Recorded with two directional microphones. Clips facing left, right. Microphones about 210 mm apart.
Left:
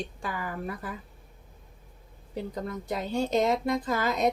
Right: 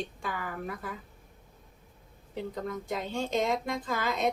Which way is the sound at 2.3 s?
40° left (ahead or behind).